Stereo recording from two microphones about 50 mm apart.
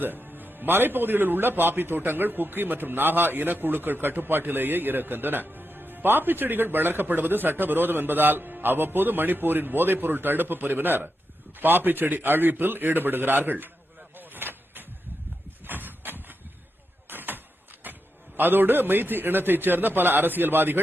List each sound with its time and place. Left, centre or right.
0.0 s a man's voice: right
14.2 s vehicle: right
15.6 s horse: right
17.1 s a sound: right
18.3 s a man's voice: right